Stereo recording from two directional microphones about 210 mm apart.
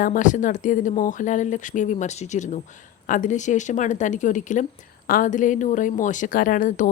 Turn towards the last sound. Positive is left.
turn(degrees=40)  # may be behind; listen again after turning